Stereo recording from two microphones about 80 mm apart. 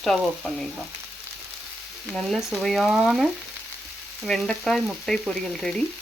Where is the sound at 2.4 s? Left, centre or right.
Centre.